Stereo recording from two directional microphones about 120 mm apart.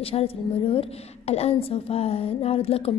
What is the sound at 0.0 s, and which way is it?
A woman's voice, 55° left (ahead or behind).